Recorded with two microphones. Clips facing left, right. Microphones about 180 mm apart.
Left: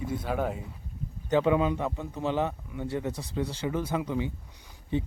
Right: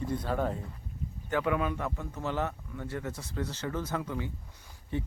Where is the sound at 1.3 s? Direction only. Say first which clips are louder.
Left 6 dB; 20° left (ahead or behind).